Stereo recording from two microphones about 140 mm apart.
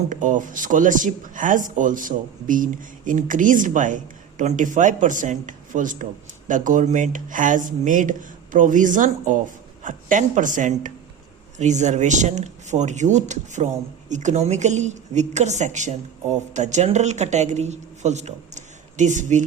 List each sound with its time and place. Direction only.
0.1 s speech: 65° right (ahead or behind)